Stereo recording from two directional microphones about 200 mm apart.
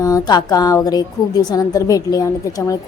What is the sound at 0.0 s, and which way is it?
A woman's voice, 20° left (ahead or behind).